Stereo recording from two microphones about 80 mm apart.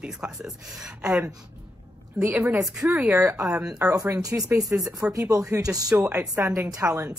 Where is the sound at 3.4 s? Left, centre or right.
Centre.